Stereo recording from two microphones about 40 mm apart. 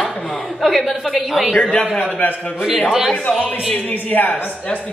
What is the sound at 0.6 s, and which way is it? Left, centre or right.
Speech, centre.